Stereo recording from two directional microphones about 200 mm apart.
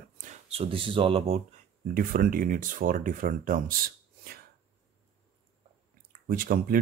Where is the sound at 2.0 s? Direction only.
45° right (ahead or behind).